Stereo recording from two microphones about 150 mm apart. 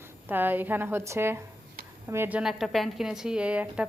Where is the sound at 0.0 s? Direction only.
15° right (ahead or behind).